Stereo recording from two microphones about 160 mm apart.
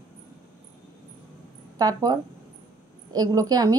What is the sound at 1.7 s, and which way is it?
A woman's voice, 25° right (ahead or behind).